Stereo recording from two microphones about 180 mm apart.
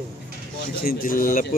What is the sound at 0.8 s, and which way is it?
Speech, 55° left (ahead or behind).